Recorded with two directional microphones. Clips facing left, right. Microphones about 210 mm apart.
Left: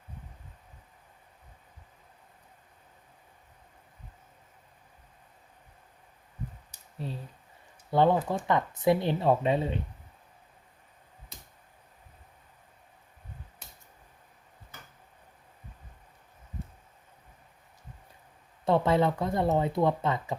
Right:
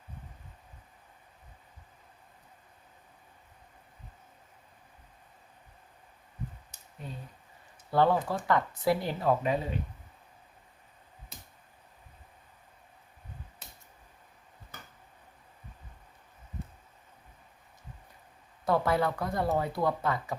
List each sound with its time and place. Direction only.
7.0 s speech: 30° left (ahead or behind)
7.9 s speech: 20° left (ahead or behind)
18.6 s speech: 25° left (ahead or behind)